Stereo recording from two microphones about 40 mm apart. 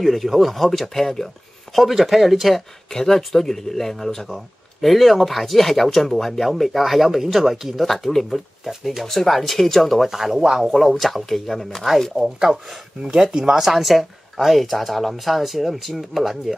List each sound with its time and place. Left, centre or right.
0.0 s speech: centre
1.8 s speech: centre
2.9 s speech: centre
10.0 s speech: centre
12.2 s speech: centre